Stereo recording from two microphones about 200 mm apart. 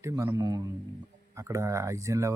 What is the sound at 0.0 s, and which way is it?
Speech, 15° right (ahead or behind).